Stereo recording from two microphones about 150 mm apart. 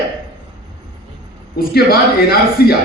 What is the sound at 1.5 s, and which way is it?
A man's voice, 90° left.